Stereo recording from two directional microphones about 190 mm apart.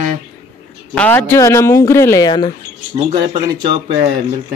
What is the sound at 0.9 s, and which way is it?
Speech, 10° left (ahead or behind).